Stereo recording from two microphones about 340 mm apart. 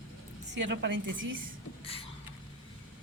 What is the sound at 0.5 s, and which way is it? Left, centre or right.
Speech, right.